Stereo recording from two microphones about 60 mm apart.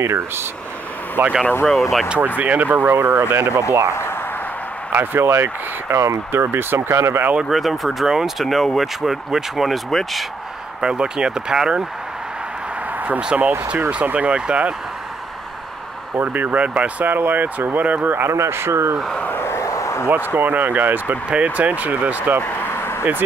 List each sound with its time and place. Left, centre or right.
0.0 s speech: right
1.7 s speech: centre
2.0 s speech: right
3.9 s a sound: left
4.9 s speech: right
7.3 s speech: centre
10.8 s speech: centre
13.3 s speech: centre
16.2 s speech: right
18.3 s speech: right
19.4 s vehicle: left
20.3 s speech: right
22.4 s a sound: left